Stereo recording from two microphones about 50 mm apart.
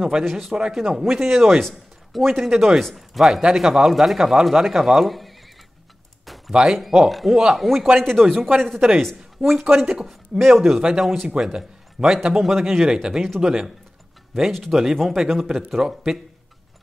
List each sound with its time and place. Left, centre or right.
0.2 s speech: centre
2.8 s speech: centre
6.2 s a sound: centre
6.5 s speech: centre
9.2 s a man's voice: centre
14.5 s speech: centre